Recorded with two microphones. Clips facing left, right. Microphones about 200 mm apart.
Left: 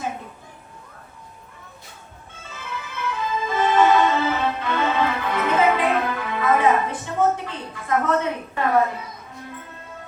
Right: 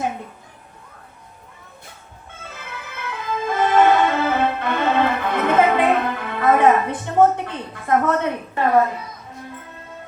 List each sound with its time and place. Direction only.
2.5 s music: 55° right (ahead or behind)